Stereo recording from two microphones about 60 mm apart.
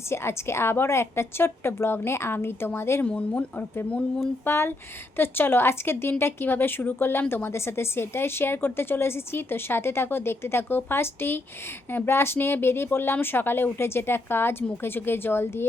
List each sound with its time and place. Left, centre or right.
0.1 s a woman's voice: left
3.1 s speech: left
4.4 s a woman's voice: left